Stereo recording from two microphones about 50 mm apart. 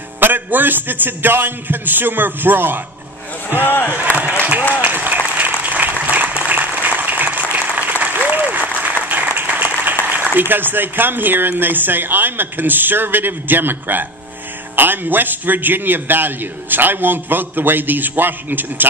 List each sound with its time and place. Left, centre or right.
0.2 s a man's voice: right
3.5 s speech: left
4.8 s applause: right
10.5 s a man's voice: right